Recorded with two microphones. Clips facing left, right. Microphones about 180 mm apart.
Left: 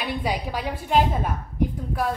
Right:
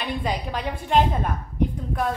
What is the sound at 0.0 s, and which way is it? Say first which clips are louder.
A woman's voice: even; 5° left (ahead or behind).